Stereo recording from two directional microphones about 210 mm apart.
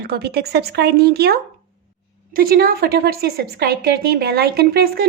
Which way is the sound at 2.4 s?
45° right (ahead or behind).